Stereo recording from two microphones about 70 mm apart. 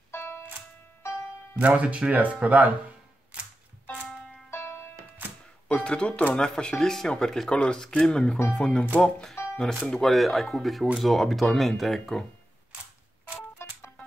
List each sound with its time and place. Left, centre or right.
0.1 s music: left
1.6 s speech: centre
4.5 s music: left
5.7 s speech: centre
13.4 s music: left